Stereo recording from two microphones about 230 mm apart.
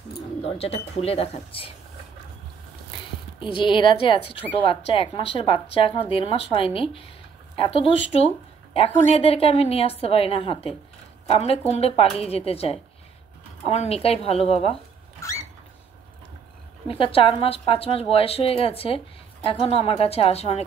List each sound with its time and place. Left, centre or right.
0.4 s speech: left
3.3 s speech: left
16.8 s speech: left